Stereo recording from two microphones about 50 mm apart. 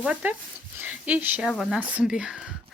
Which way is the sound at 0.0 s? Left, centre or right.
Right.